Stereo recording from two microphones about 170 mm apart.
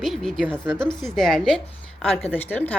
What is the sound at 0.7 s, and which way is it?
Speech, 25° left (ahead or behind).